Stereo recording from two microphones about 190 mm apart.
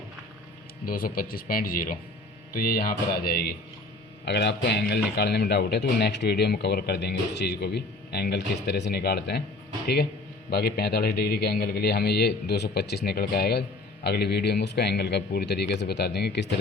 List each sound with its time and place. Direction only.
0.9 s a man's voice: 50° left (ahead or behind)